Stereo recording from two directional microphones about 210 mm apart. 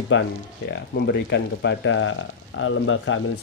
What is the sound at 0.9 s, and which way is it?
Speech, 55° left (ahead or behind).